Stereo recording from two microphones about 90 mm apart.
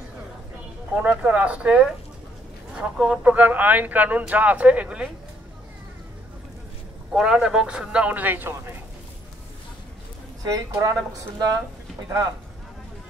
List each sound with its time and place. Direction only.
0.9 s speech: 20° right (ahead or behind)
7.1 s speech: 5° right (ahead or behind); by 8.7 s 20° right (ahead or behind)
10.4 s a woman's voice: 40° right (ahead or behind)